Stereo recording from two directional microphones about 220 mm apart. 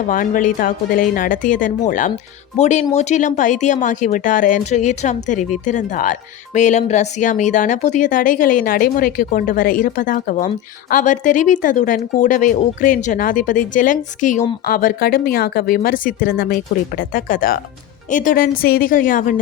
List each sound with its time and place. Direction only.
0.1 s speech: 35° left (ahead or behind)